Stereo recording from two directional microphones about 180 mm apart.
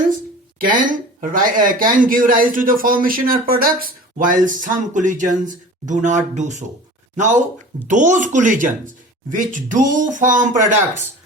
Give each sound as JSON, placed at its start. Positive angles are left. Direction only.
{"t": 0.6, "sound": "speech", "side_deg": -50}